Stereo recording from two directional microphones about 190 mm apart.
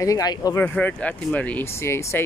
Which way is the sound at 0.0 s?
20° left (ahead or behind).